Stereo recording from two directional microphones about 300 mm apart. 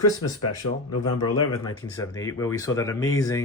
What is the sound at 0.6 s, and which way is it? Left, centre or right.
Speech, left.